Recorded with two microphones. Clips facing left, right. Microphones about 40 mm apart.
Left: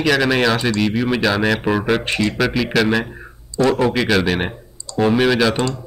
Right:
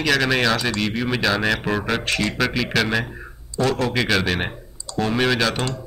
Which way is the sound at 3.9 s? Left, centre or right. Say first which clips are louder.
Left 3 dB; centre.